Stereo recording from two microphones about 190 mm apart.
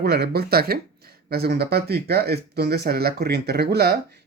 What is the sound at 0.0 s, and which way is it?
Speech, 55° right (ahead or behind).